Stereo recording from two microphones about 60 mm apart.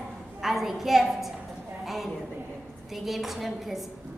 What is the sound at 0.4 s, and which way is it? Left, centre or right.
Speech, centre.